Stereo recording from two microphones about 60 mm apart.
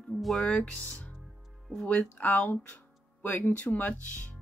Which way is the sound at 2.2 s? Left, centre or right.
Left.